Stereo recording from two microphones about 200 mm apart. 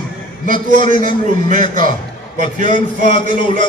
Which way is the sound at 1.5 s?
40° right (ahead or behind).